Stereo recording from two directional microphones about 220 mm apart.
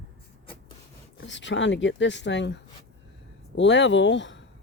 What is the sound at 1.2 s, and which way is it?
Speech, 55° left (ahead or behind).